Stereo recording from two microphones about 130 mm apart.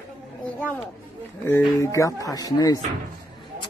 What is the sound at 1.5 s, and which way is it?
Speech, 20° left (ahead or behind).